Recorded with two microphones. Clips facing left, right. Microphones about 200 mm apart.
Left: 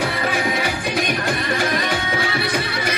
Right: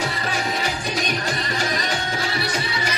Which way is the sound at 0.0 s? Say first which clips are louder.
Left 4 dB; 55° left (ahead or behind).